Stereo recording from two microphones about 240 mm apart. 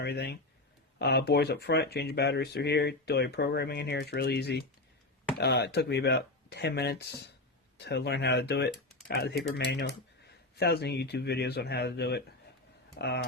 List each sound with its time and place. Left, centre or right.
0.0 s speech: left